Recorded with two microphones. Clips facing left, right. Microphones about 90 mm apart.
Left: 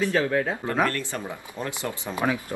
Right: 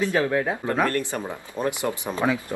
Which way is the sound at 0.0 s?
15° right (ahead or behind).